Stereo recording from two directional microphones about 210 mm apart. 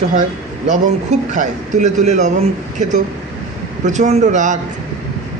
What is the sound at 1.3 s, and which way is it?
A man's voice, 35° right (ahead or behind).